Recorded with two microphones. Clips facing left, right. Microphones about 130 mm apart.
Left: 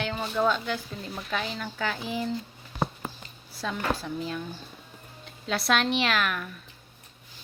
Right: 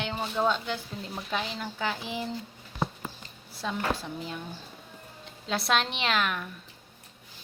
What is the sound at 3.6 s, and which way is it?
Speech, 20° right (ahead or behind).